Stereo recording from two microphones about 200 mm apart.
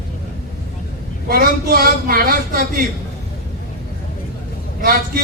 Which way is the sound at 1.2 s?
45° right (ahead or behind).